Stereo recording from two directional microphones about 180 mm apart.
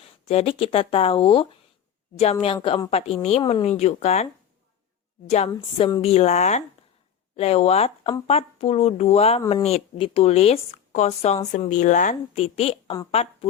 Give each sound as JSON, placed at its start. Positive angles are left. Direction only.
{"t": 0.0, "sound": "speech", "side_deg": 35}
{"t": 5.3, "sound": "speech", "side_deg": 35}